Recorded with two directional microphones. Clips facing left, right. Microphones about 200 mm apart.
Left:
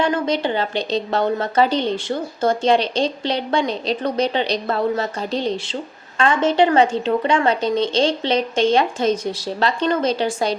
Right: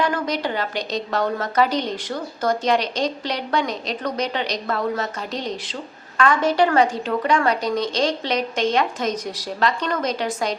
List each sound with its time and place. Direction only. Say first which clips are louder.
0.0 s a woman's voice: left 3 dB; 25° left (ahead or behind)